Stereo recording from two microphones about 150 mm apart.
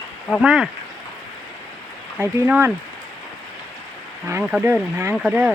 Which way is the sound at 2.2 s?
10° right (ahead or behind).